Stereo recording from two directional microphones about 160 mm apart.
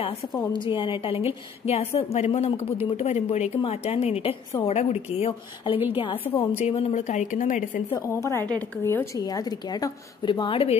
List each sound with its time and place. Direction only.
0.7 s a woman's voice: 30° left (ahead or behind); by 7.8 s 50° left (ahead or behind)
8.1 s a woman's voice: 15° left (ahead or behind); by 10.8 s 35° left (ahead or behind)